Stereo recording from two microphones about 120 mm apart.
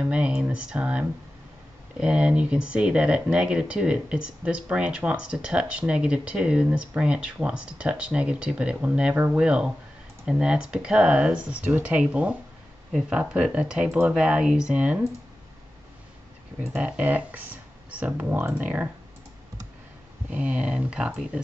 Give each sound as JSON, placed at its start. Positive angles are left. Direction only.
{"t": 0.0, "sound": "speech", "side_deg": -10}
{"t": 16.7, "sound": "speech", "side_deg": -10}
{"t": 20.2, "sound": "speech", "side_deg": -10}